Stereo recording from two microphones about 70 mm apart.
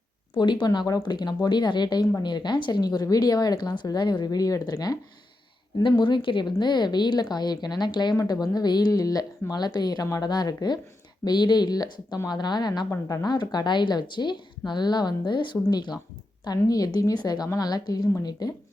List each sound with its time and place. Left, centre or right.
0.3 s a woman's voice: left
5.7 s a woman's voice: left
8.3 s a woman's voice: left
11.3 s speech: left
12.3 s a woman's voice: left
16.4 s a woman's voice: left